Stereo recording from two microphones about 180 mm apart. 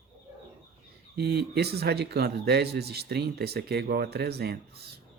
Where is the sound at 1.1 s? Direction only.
60° right (ahead or behind).